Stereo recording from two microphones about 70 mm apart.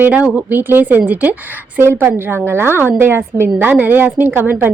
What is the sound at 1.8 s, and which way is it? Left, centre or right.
A woman's voice, right.